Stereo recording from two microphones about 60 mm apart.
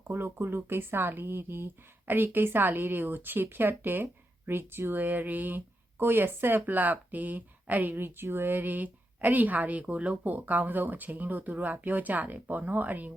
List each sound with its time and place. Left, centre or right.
0.1 s speech: right